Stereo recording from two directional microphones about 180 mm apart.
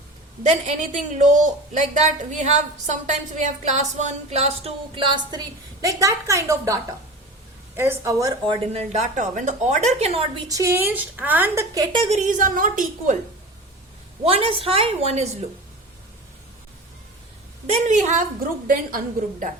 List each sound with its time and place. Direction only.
0.4 s a woman's voice: 40° right (ahead or behind); by 6.7 s 15° right (ahead or behind)
7.8 s a woman's voice: 15° right (ahead or behind)
8.6 s a woman's voice: 35° right (ahead or behind)
10.5 s a woman's voice: 15° right (ahead or behind); by 13.1 s 50° right (ahead or behind)
14.3 s a woman's voice: 30° right (ahead or behind)
17.7 s a woman's voice: 40° right (ahead or behind)
18.7 s a woman's voice: 50° right (ahead or behind)